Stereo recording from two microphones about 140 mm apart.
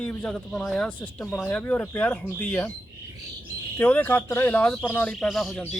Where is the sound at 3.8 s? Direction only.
10° left (ahead or behind).